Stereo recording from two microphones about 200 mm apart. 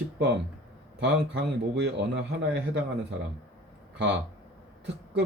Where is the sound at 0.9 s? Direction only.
60° right (ahead or behind).